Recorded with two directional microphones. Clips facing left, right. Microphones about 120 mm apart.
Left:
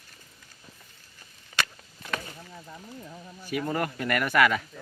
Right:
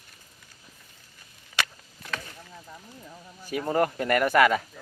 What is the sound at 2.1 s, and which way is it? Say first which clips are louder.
Chop: left 2 dB; 5° left (ahead or behind).